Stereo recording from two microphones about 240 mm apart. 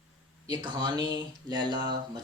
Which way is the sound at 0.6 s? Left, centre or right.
Centre.